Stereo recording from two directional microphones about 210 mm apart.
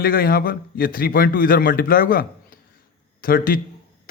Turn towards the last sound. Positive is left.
turn(degrees=45)  # may be behind; listen again after turning